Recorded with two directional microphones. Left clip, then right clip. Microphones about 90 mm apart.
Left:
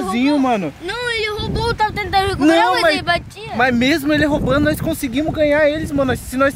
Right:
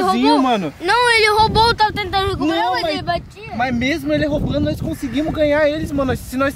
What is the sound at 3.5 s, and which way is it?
Speech, 40° left (ahead or behind).